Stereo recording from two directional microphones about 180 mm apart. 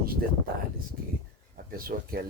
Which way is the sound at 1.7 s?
55° right (ahead or behind).